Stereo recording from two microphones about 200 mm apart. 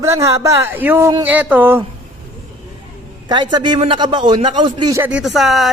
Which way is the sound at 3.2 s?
20° right (ahead or behind).